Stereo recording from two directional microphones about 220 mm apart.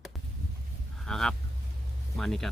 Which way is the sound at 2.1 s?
Centre (ahead or behind).